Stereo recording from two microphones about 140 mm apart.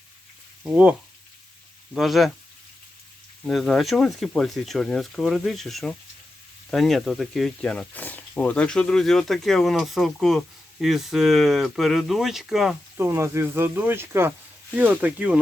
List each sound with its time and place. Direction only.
0.6 s speech: 5° right (ahead or behind)
2.0 s speech: centre (ahead or behind)
3.4 s speech: 5° left (ahead or behind)
13.0 s speech: 20° right (ahead or behind)